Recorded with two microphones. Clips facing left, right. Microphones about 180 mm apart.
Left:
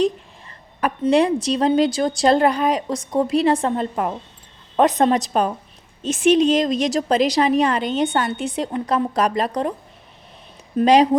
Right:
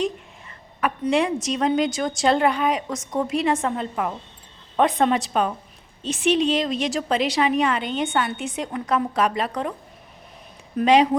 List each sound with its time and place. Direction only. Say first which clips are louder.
1.1 s a woman's voice: left 6 dB; 35° left (ahead or behind)
10.8 s a woman's voice: left 3 dB; 35° left (ahead or behind)